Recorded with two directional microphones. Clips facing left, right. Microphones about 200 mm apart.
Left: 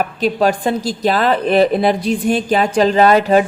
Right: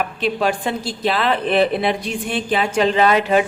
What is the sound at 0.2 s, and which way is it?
A woman's voice, 40° left (ahead or behind).